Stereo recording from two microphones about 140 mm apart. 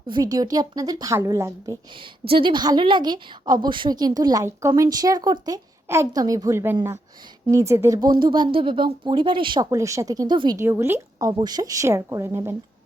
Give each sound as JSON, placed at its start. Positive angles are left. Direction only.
{"t": 0.1, "sound": "speech", "side_deg": -25}
{"t": 2.0, "sound": "a woman's voice", "side_deg": -40}
{"t": 10.6, "sound": "speech", "side_deg": -20}